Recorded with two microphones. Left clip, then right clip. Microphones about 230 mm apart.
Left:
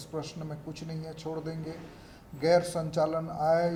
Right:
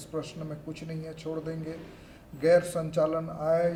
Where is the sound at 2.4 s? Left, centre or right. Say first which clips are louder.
Right 2 dB; left.